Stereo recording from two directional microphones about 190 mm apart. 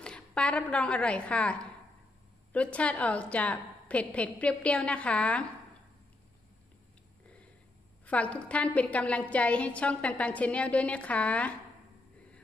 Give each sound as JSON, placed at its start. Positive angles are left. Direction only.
{"t": 0.0, "sound": "a woman's voice", "side_deg": 5}
{"t": 8.0, "sound": "a woman's voice", "side_deg": 5}